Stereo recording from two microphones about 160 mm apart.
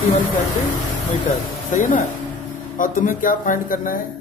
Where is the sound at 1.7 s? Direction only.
55° left (ahead or behind).